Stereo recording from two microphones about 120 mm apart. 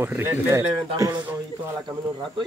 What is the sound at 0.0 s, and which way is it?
Speech, 20° right (ahead or behind).